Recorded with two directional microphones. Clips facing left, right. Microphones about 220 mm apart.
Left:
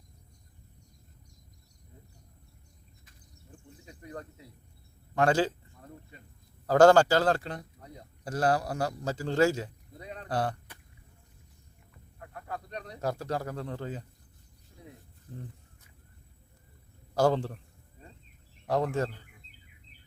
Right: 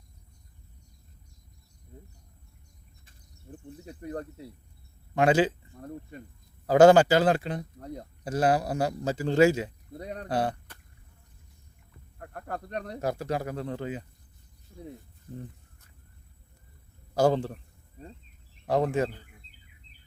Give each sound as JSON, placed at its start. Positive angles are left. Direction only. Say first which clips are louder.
{"t": 3.1, "sound": "insect", "louder": "right 8 dB", "side_deg": -30}
{"t": 5.1, "sound": "a man's voice", "louder": "right 3 dB", "side_deg": -20}
{"t": 5.8, "sound": "speech", "louder": "right 10 dB", "side_deg": -55}
{"t": 6.7, "sound": "a man's voice", "louder": "right 2 dB", "side_deg": -20}
{"t": 10.0, "sound": "speech", "louder": "right 5 dB", "side_deg": -45}
{"t": 10.2, "sound": "a man's voice", "louder": "right 3 dB", "side_deg": -20}
{"t": 12.2, "sound": "a sound", "louder": "right 3 dB", "side_deg": -55}
{"t": 13.0, "sound": "speech", "louder": "right 1 dB", "side_deg": -15}
{"t": 17.2, "sound": "speech", "louder": "right 2 dB", "side_deg": -15}
{"t": 18.8, "sound": "speech", "louder": "right 4 dB", "side_deg": -20}